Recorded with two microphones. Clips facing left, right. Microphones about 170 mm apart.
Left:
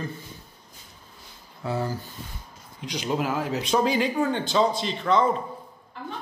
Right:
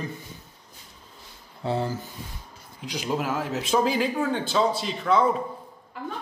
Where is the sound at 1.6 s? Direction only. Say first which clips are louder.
Right 2 dB; 25° right (ahead or behind).